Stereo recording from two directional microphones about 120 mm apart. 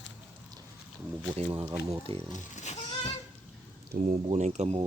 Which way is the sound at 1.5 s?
20° right (ahead or behind).